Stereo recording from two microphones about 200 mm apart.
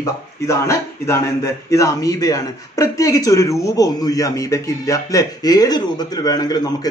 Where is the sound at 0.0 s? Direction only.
15° left (ahead or behind).